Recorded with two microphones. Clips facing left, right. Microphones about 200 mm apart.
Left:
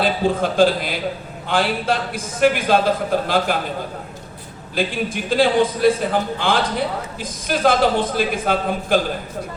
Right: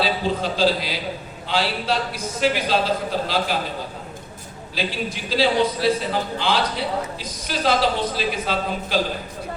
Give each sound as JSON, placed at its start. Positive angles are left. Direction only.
{"t": 0.0, "sound": "a man's voice", "side_deg": 50}
{"t": 4.7, "sound": "a man's voice", "side_deg": 50}